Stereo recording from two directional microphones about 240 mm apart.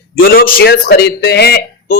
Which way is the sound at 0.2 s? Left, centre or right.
Left.